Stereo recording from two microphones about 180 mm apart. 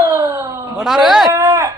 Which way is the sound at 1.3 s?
15° right (ahead or behind).